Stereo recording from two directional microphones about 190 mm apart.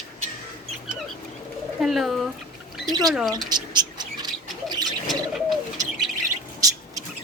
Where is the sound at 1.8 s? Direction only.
Centre (ahead or behind).